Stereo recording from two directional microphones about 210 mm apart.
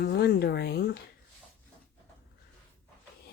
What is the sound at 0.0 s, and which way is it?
Speech, 50° left (ahead or behind).